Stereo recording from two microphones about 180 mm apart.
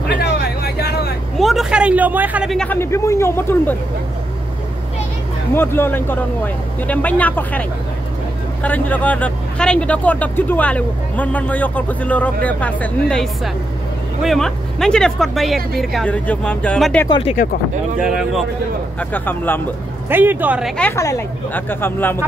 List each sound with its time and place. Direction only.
0.2 s vehicle: 65° left (ahead or behind)
1.4 s a sound: centre (ahead or behind)
2.5 s speech: 5° left (ahead or behind)
5.5 s speech: 10° left (ahead or behind)
8.6 s speech: 10° left (ahead or behind)
17.1 s speech: 35° left (ahead or behind)
18.0 s speech: 5° right (ahead or behind)
18.9 s speech: 10° left (ahead or behind)
20.1 s speech: 10° right (ahead or behind)
20.7 s speech: 10° left (ahead or behind)